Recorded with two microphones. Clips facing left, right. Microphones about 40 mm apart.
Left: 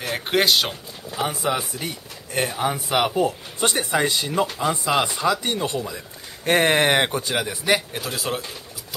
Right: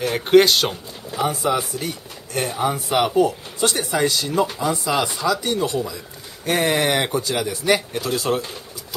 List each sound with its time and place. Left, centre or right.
0.0 s speech: centre